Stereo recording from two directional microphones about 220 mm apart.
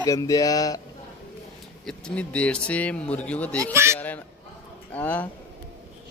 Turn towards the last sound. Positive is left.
turn(degrees=5)  # may be behind; listen again after turning